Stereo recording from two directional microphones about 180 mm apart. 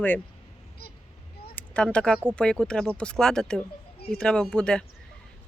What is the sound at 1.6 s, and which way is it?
Speech, 5° left (ahead or behind).